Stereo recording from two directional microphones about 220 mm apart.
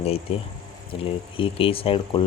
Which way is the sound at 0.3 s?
25° left (ahead or behind).